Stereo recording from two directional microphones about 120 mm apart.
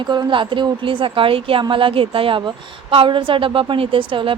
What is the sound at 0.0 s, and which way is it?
A woman's voice, 40° right (ahead or behind).